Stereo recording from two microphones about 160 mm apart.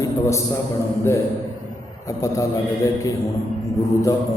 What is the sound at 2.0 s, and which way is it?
Speech, 20° left (ahead or behind).